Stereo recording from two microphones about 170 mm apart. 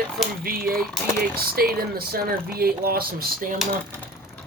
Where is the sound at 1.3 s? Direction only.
60° right (ahead or behind).